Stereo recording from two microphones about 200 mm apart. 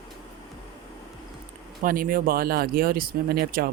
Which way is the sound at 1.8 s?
45° right (ahead or behind).